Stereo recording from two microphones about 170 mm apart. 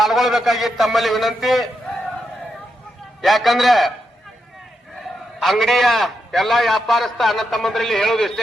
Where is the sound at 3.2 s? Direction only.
Centre (ahead or behind).